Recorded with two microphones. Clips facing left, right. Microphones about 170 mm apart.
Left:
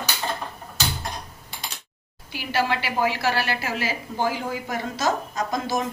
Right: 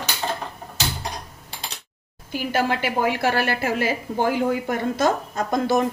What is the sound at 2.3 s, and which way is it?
A woman's voice, 50° right (ahead or behind).